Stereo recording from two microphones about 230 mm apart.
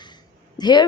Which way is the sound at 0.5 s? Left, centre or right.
Centre.